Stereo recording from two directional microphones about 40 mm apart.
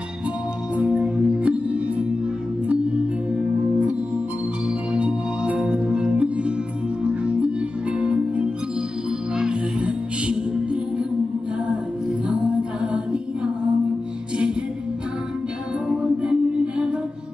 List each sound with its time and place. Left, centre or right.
1.1 s music: right
4.9 s music: right
8.0 s music: right
9.5 s music: right
12.3 s music: right
16.0 s music: right